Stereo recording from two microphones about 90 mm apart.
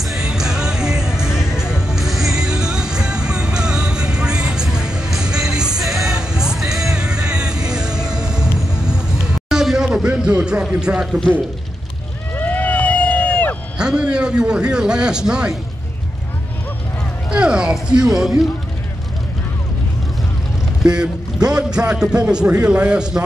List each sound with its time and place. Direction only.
0.0 s music: 5° right (ahead or behind)
8.8 s a sound: 10° right (ahead or behind)
12.4 s a sound: 20° left (ahead or behind)
13.7 s a man's voice: 10° right (ahead or behind)
17.3 s a man's voice: 10° right (ahead or behind)
20.8 s a man's voice: 10° right (ahead or behind)